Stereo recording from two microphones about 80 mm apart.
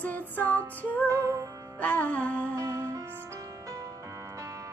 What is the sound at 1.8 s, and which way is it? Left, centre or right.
Music, centre.